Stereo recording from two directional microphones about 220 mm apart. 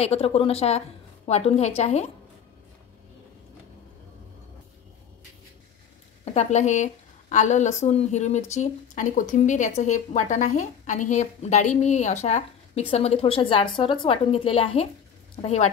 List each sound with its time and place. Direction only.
0.0 s a woman's voice: 25° left (ahead or behind)
6.3 s a woman's voice: 30° left (ahead or behind)